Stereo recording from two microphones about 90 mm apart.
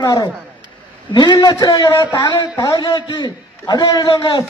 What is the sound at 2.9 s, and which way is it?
A man's voice, 55° left (ahead or behind).